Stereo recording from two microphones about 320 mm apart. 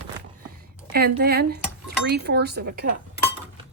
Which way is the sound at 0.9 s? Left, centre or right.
Right.